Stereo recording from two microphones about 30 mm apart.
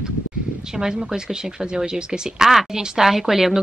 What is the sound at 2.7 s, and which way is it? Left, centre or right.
Speech, centre.